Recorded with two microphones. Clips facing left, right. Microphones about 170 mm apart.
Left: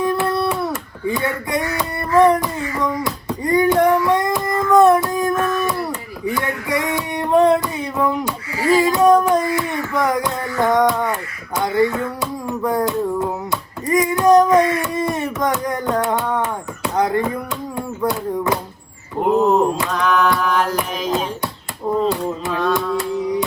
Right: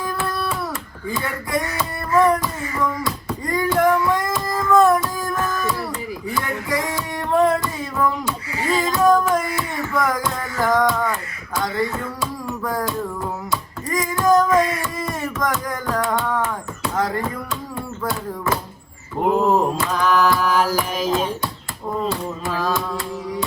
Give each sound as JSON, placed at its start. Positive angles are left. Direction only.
{"t": 0.0, "sound": "hands", "side_deg": 20}
{"t": 1.5, "sound": "child singing", "side_deg": 20}
{"t": 2.4, "sound": "a sound", "side_deg": 20}
{"t": 17.7, "sound": "speech", "side_deg": 20}
{"t": 19.2, "sound": "music", "side_deg": 0}
{"t": 22.4, "sound": "music", "side_deg": 0}